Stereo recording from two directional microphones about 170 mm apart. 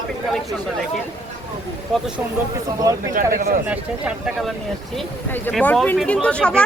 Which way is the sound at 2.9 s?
20° right (ahead or behind).